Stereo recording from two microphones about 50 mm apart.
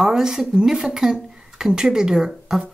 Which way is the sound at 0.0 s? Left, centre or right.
Centre.